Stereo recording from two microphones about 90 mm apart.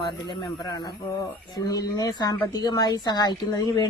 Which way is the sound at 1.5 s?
45° left (ahead or behind).